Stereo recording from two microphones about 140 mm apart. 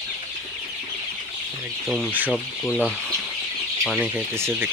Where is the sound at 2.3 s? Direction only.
10° left (ahead or behind).